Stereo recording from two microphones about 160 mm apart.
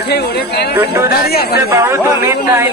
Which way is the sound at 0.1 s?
90° left.